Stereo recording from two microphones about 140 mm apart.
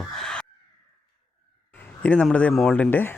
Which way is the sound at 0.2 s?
5° left (ahead or behind).